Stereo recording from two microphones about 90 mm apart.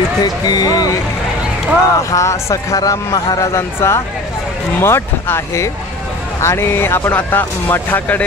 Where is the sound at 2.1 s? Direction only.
35° left (ahead or behind).